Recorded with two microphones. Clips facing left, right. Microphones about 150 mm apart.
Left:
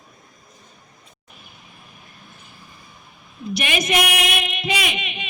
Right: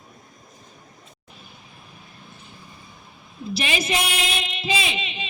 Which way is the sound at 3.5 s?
30° right (ahead or behind).